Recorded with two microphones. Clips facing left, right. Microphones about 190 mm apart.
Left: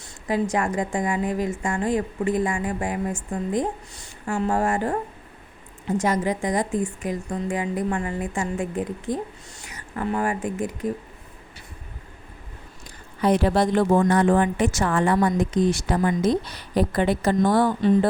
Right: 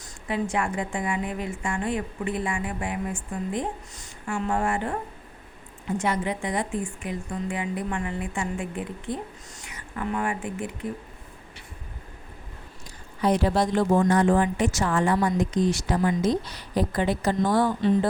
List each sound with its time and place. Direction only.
0.0 s a woman's voice: 40° left (ahead or behind)
6.0 s a woman's voice: 40° left (ahead or behind)
13.2 s a woman's voice: 60° left (ahead or behind)